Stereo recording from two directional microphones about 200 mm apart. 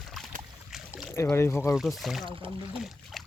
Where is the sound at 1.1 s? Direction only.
10° left (ahead or behind).